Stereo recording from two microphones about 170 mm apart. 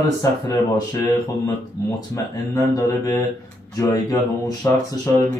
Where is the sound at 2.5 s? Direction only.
20° left (ahead or behind).